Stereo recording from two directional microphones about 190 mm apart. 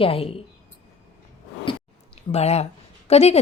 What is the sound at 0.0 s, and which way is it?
Speech, 30° left (ahead or behind).